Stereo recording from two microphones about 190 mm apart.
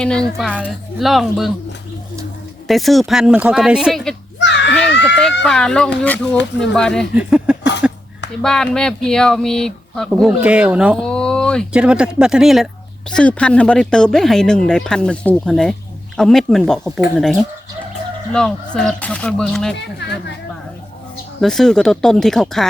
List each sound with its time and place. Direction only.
0.0 s speech: 5° left (ahead or behind)
2.6 s speech: centre (ahead or behind)
4.4 s a sound: 65° left (ahead or behind)
5.2 s speech: 5° left (ahead or behind)
7.8 s a sound: 5° right (ahead or behind)
8.4 s speech: 5° left (ahead or behind)
18.3 s speech: 5° left (ahead or behind)
19.7 s speech: 65° left (ahead or behind)
21.4 s speech: centre (ahead or behind)